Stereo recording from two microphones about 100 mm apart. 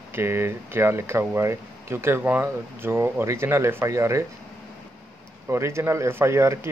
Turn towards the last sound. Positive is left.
turn(degrees=-25)  # may be behind; listen again after turning